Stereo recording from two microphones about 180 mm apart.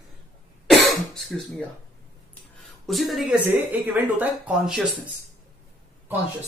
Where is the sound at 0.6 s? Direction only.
Centre (ahead or behind).